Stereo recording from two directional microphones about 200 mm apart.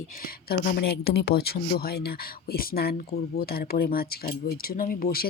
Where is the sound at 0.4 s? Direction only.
50° left (ahead or behind).